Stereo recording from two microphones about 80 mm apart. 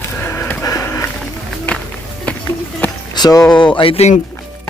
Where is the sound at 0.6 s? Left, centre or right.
Left.